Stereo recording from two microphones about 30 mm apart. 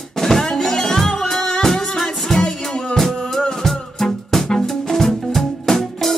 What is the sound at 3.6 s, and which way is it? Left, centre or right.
Music, centre.